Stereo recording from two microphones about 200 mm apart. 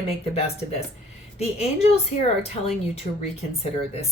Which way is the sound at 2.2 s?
30° left (ahead or behind).